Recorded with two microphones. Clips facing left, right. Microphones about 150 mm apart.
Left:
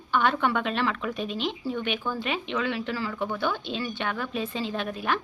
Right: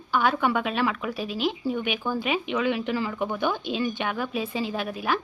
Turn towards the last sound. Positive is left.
turn(degrees=-5)  # may be behind; listen again after turning